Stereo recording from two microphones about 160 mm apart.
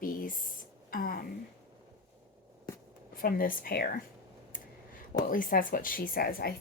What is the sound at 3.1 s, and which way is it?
Speech, 60° left (ahead or behind).